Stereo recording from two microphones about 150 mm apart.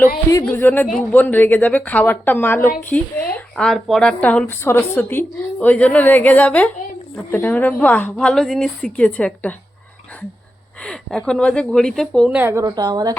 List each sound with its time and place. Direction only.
0.4 s a woman's voice: 10° left (ahead or behind)
11.3 s speech: 5° left (ahead or behind)
12.4 s speech: 20° right (ahead or behind)